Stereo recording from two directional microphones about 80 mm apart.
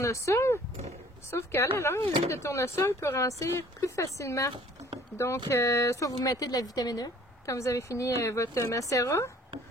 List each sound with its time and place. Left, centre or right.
0.0 s a woman's voice: left